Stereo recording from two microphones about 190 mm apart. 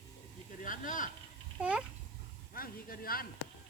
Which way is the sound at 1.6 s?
5° right (ahead or behind).